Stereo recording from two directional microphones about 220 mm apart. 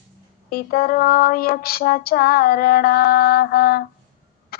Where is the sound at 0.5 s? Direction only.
45° left (ahead or behind).